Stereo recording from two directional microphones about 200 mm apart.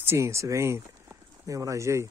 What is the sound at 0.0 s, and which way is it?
Speech, 15° right (ahead or behind).